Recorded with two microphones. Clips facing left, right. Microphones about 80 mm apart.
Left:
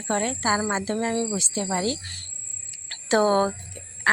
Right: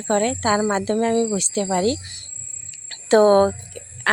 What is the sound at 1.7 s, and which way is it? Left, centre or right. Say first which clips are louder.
Speech: right 7 dB; right.